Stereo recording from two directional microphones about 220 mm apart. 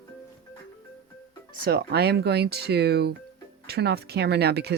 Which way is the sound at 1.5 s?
45° right (ahead or behind).